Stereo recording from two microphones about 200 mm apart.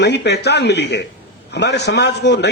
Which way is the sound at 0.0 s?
60° left (ahead or behind).